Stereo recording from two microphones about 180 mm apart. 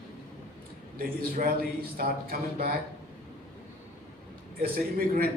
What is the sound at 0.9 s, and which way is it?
A man's voice, 50° right (ahead or behind).